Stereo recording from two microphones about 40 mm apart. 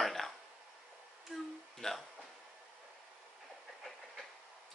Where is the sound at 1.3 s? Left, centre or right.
Centre.